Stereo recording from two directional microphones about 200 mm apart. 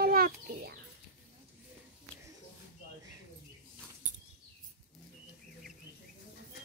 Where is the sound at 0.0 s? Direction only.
50° right (ahead or behind).